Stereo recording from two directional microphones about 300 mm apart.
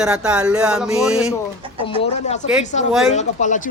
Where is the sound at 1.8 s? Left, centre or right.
Centre.